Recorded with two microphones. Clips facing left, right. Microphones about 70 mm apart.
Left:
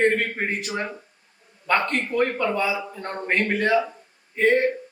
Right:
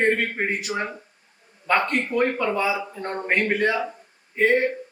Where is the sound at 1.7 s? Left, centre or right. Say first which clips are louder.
Right 1 dB; centre.